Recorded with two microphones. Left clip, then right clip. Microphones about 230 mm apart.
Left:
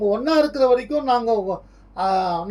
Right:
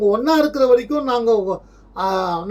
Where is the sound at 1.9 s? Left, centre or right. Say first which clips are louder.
Even; centre.